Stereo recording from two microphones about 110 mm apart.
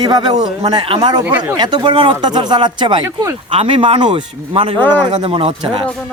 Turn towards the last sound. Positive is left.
turn(degrees=-60)  # may be behind; listen again after turning